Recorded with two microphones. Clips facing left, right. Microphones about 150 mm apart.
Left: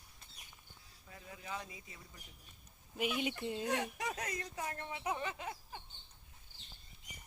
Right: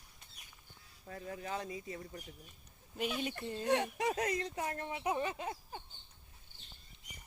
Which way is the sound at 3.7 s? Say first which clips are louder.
Right 10 dB; 30° right (ahead or behind).